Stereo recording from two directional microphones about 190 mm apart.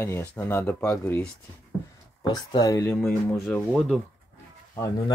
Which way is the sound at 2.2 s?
20° left (ahead or behind).